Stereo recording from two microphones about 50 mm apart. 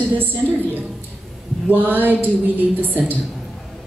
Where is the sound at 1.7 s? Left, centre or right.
Right.